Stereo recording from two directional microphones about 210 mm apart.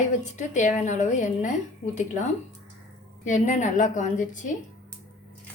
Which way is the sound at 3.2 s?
35° left (ahead or behind).